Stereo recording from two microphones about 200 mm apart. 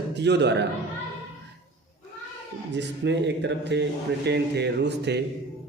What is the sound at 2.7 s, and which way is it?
Speech, 60° right (ahead or behind).